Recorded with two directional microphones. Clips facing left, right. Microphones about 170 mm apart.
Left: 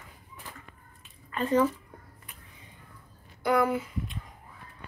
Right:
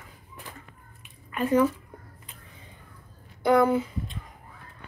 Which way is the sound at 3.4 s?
25° right (ahead or behind).